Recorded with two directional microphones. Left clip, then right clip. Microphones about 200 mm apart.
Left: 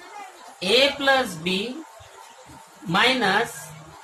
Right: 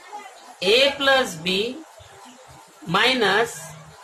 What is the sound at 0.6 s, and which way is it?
A woman's voice, 25° right (ahead or behind).